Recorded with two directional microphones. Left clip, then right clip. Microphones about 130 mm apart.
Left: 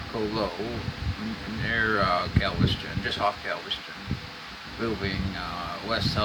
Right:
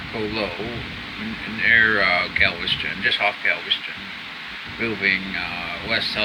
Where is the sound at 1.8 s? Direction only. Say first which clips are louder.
Right 7 dB; 10° right (ahead or behind).